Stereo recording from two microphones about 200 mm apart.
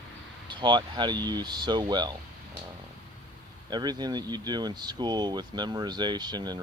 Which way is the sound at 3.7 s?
20° right (ahead or behind).